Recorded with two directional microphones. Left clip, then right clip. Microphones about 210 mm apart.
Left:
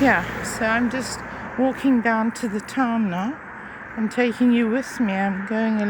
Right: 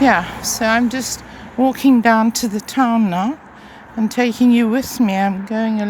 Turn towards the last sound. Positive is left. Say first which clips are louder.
# right 3 dB
turn(degrees=-20)  # may be behind; listen again after turning